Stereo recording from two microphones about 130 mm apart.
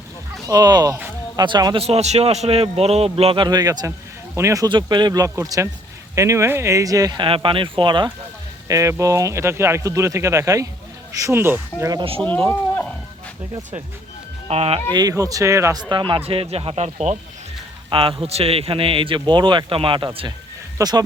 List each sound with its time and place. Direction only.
0.4 s a man's voice: 30° right (ahead or behind)
1.9 s a man's voice: 55° right (ahead or behind); by 7.3 s 30° right (ahead or behind)
7.3 s a man's voice: 45° right (ahead or behind)
8.6 s speech: 25° right (ahead or behind)
11.8 s speech: 30° right (ahead or behind)
12.5 s livestock: 15° left (ahead or behind)
14.4 s speech: 50° right (ahead or behind)
14.9 s speech: 25° right (ahead or behind)
15.8 s a man's voice: 35° right (ahead or behind); by 17.2 s 60° right (ahead or behind)
17.8 s a man's voice: 40° right (ahead or behind)
20.7 s speech: 30° right (ahead or behind)